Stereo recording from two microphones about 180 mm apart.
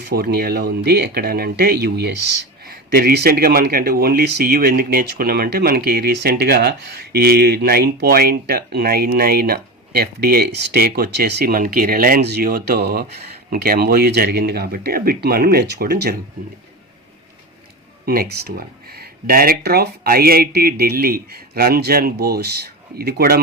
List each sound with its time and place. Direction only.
0.0 s speech: 60° right (ahead or behind)
18.0 s speech: 55° right (ahead or behind)